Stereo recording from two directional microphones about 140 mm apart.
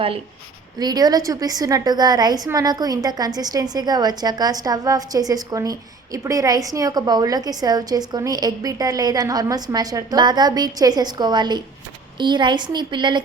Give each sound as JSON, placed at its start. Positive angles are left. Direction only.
{"t": 0.8, "sound": "a woman's voice", "side_deg": -30}